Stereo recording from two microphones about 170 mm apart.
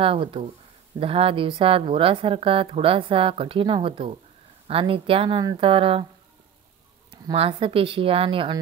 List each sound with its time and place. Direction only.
0.0 s a woman's voice: 30° right (ahead or behind)
7.3 s a woman's voice: 30° right (ahead or behind)